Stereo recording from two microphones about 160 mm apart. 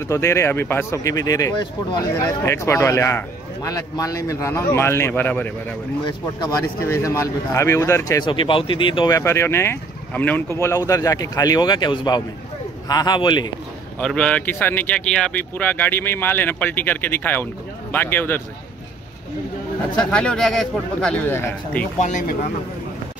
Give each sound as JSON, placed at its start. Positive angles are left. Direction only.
{"t": 0.1, "sound": "speech", "side_deg": 15}
{"t": 6.8, "sound": "speech", "side_deg": 15}
{"t": 13.9, "sound": "speech", "side_deg": 5}
{"t": 20.1, "sound": "speech", "side_deg": 5}
{"t": 21.9, "sound": "speech", "side_deg": 50}